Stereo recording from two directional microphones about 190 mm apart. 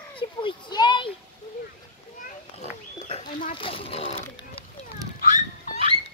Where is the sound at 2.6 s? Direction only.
35° left (ahead or behind).